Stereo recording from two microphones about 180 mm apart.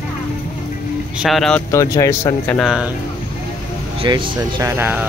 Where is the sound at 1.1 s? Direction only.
Centre (ahead or behind).